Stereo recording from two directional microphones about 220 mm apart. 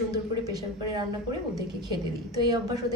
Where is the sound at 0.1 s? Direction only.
15° right (ahead or behind).